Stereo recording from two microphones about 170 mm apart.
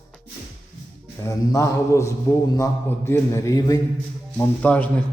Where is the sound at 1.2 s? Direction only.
20° left (ahead or behind).